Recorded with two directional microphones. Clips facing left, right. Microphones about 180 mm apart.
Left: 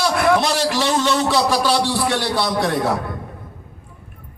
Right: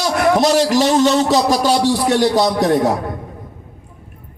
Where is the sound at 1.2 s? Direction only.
40° right (ahead or behind).